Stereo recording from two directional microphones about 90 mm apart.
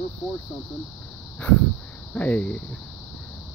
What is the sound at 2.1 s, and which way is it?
Speech, 15° left (ahead or behind).